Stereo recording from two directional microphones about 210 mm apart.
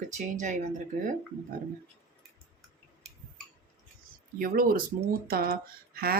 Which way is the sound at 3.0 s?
Centre (ahead or behind).